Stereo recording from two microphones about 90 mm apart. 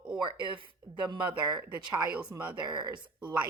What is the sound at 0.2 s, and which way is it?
A woman's voice, 60° right (ahead or behind).